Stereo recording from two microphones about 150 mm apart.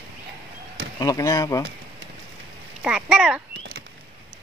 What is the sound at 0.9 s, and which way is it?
Speech, 20° left (ahead or behind).